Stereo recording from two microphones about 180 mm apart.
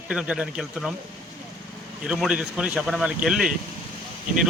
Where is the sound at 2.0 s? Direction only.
5° right (ahead or behind).